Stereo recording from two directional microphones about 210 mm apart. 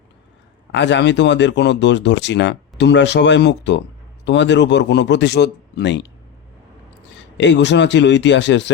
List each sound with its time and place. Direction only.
0.7 s speech: 60° left (ahead or behind)
7.3 s speech: 55° left (ahead or behind)